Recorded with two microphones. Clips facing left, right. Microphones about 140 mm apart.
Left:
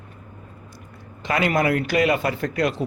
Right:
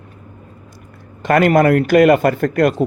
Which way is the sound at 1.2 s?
50° right (ahead or behind).